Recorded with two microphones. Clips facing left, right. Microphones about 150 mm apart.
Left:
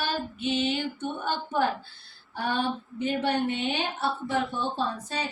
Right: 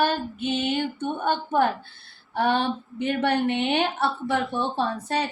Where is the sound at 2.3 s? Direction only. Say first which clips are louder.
Right 5 dB; 70° right (ahead or behind).